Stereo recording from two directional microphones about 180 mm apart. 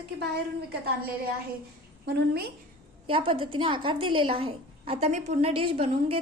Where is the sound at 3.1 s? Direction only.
30° right (ahead or behind).